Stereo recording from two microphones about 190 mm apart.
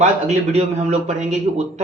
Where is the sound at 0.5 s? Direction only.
35° right (ahead or behind).